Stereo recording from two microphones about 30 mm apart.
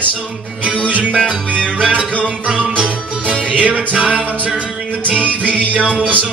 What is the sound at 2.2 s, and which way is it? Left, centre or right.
Music, right.